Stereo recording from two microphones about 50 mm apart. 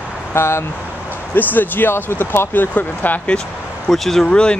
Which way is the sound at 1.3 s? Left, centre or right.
Left.